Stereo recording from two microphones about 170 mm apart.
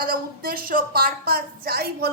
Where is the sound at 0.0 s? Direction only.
60° right (ahead or behind).